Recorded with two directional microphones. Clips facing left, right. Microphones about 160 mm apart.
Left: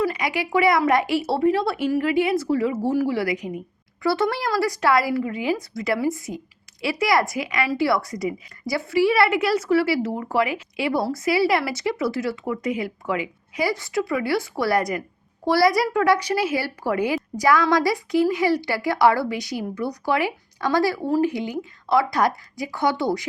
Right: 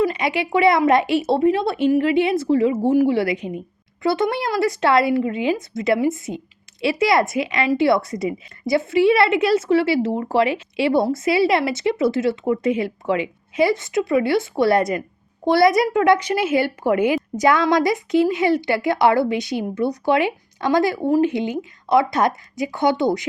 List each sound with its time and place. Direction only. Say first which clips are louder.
0.0 s a woman's voice: right 3 dB; 25° right (ahead or behind)